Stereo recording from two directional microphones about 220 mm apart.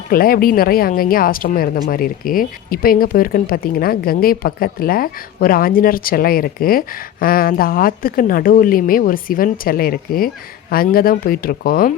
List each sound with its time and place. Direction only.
0.1 s speech: 40° left (ahead or behind)